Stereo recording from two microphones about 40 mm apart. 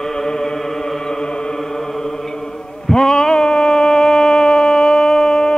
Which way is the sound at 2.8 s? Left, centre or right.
Centre.